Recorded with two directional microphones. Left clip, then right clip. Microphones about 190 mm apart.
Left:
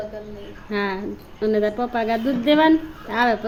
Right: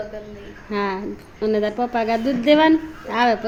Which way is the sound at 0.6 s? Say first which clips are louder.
Right 1 dB; centre (ahead or behind).